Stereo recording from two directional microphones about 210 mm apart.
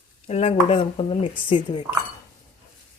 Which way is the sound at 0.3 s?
30° left (ahead or behind).